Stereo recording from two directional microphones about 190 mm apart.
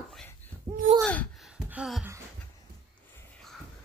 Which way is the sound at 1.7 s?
5° right (ahead or behind).